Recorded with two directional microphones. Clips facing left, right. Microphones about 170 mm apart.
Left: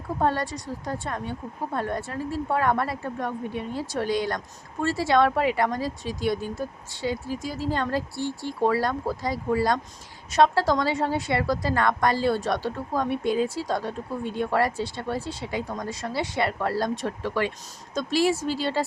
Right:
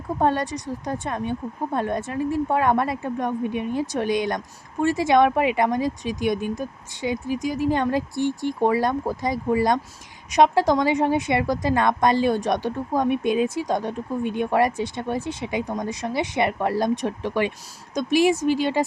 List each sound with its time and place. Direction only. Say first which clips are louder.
0.2 s speech: right 3 dB; 20° right (ahead or behind)